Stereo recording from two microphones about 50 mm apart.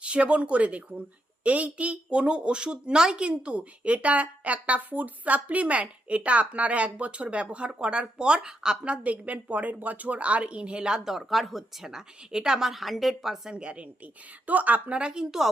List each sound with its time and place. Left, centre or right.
0.0 s a woman's voice: right
11.1 s speech: centre
13.5 s a woman's voice: right